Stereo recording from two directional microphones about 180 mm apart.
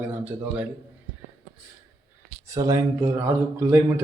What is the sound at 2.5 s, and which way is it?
Speech, 15° right (ahead or behind).